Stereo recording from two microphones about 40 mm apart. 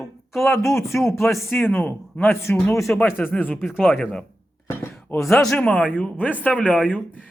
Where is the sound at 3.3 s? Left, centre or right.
Left.